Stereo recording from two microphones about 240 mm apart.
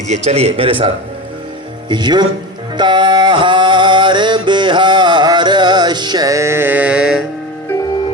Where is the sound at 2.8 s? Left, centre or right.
Centre.